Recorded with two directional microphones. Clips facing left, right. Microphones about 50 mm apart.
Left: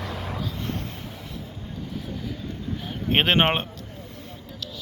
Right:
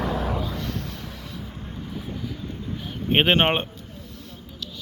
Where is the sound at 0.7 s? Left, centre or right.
Left.